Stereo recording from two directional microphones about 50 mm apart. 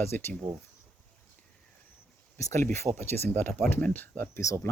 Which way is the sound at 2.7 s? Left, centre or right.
Left.